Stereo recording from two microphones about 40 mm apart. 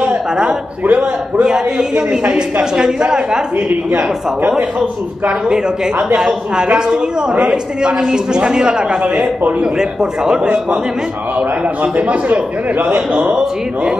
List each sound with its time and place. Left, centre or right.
0.8 s a man's voice: right
1.4 s a man's voice: centre
5.9 s a man's voice: right
6.5 s a man's voice: centre
11.3 s a man's voice: right